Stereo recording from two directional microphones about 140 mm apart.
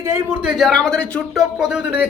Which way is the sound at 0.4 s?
Centre (ahead or behind).